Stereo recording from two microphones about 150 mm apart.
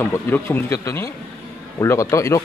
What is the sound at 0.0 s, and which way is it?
A man's voice, 15° left (ahead or behind).